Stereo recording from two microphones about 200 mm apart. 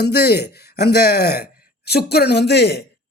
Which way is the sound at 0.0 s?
55° left (ahead or behind).